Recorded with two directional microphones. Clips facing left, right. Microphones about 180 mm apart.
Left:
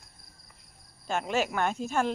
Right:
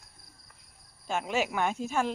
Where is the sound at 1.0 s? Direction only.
5° right (ahead or behind).